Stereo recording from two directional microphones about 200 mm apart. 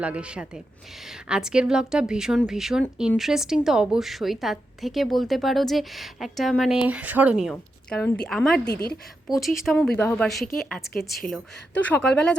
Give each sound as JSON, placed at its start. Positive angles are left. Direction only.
{"t": 0.0, "sound": "a woman's voice", "side_deg": -5}
{"t": 7.5, "sound": "a woman's voice", "side_deg": 10}
{"t": 9.6, "sound": "a woman's voice", "side_deg": 5}
{"t": 10.9, "sound": "a woman's voice", "side_deg": 50}
{"t": 11.9, "sound": "a woman's voice", "side_deg": 5}